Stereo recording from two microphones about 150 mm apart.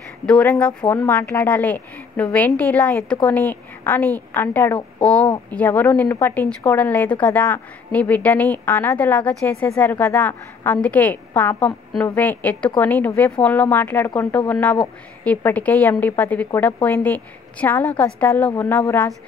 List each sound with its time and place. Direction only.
0.3 s speech: 5° left (ahead or behind)